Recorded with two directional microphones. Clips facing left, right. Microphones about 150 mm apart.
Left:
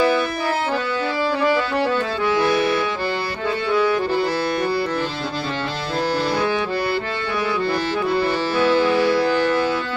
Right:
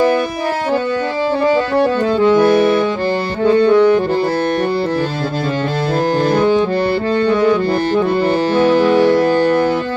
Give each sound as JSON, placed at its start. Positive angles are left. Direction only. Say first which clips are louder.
{"t": 1.5, "sound": "music", "louder": "right 8 dB", "side_deg": -20}
{"t": 2.4, "sound": "music", "louder": "right 7 dB", "side_deg": -50}
{"t": 3.4, "sound": "saxophone", "louder": "right 13 dB", "side_deg": -50}
{"t": 6.1, "sound": "saxophone", "louder": "right 8 dB", "side_deg": -50}
{"t": 7.3, "sound": "music", "louder": "right 8 dB", "side_deg": -45}